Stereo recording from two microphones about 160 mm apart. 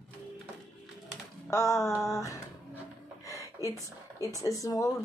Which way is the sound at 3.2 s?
20° left (ahead or behind).